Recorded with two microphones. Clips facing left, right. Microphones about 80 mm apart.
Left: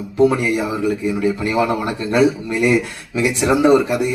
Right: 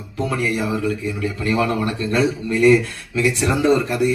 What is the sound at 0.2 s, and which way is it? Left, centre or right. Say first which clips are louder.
A man's voice: left 6 dB; centre.